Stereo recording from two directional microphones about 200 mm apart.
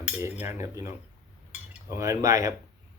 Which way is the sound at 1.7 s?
15° right (ahead or behind).